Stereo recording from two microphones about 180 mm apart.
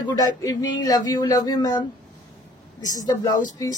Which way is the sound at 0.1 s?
20° left (ahead or behind).